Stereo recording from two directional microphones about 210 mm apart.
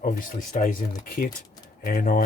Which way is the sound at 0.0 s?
40° left (ahead or behind).